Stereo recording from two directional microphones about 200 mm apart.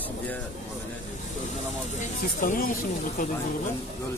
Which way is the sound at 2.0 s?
40° left (ahead or behind).